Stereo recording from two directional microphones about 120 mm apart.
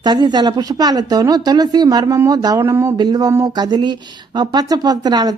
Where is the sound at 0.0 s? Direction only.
35° right (ahead or behind).